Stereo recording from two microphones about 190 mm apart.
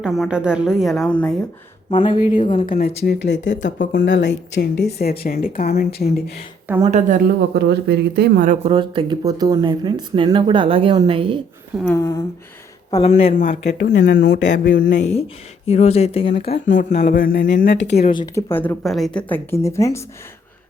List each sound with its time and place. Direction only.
0.0 s a woman's voice: centre (ahead or behind)
2.2 s speech: 40° left (ahead or behind); by 4.7 s 65° left (ahead or behind)
4.9 s speech: 55° left (ahead or behind)
6.8 s a woman's voice: 40° right (ahead or behind)
7.5 s speech: 60° right (ahead or behind)
8.4 s speech: 30° right (ahead or behind)
11.9 s a sound: 20° left (ahead or behind)
12.9 s speech: 30° left (ahead or behind)
13.7 s speech: 55° left (ahead or behind)
14.8 s speech: 65° left (ahead or behind)
15.6 s speech: 35° left (ahead or behind)
16.4 s speech: 50° left (ahead or behind)
18.2 s speech: 15° left (ahead or behind)